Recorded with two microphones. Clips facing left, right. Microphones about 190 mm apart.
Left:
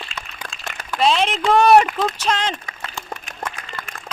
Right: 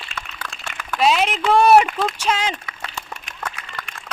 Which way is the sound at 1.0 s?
10° right (ahead or behind).